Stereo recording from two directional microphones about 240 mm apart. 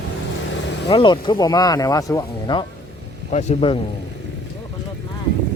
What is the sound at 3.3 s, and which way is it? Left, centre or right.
Speech, left.